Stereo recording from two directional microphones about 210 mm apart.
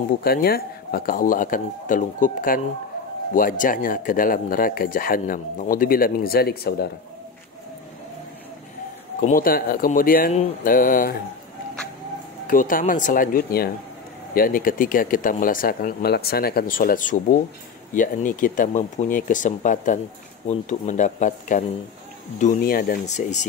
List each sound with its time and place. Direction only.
0.2 s speech: 45° left (ahead or behind)
9.2 s speech: 40° left (ahead or behind)
12.4 s speech: 40° left (ahead or behind)